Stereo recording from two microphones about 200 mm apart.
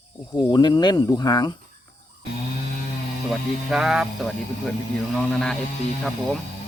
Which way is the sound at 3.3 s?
5° right (ahead or behind).